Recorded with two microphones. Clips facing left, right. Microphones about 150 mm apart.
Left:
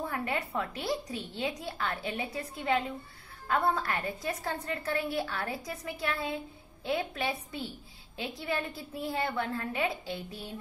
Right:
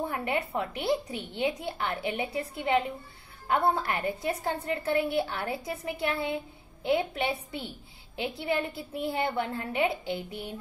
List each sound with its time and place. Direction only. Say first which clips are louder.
0.0 s a woman's voice: right 3 dB; 25° right (ahead or behind)